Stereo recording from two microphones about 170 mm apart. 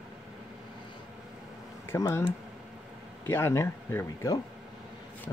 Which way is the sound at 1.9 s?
15° left (ahead or behind).